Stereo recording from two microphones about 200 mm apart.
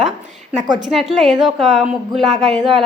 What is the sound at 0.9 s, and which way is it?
A woman's voice, centre (ahead or behind).